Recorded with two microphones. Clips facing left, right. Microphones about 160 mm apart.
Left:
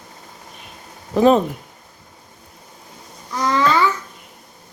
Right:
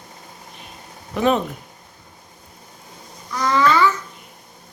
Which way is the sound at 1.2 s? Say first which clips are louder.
Left 5 dB; 35° left (ahead or behind).